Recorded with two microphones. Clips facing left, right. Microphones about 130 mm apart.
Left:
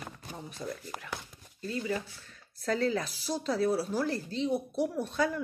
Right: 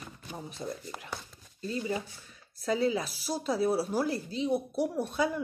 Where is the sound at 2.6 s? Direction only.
10° right (ahead or behind).